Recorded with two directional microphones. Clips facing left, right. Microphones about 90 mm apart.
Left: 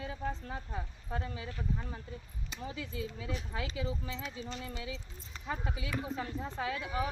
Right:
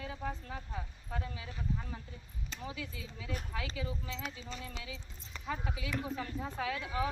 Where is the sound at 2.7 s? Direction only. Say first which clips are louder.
Left 5 dB; 35° left (ahead or behind).